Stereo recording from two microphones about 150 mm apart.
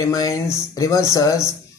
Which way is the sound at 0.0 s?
20° left (ahead or behind).